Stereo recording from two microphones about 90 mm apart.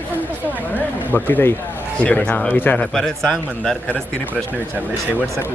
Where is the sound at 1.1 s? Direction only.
25° left (ahead or behind).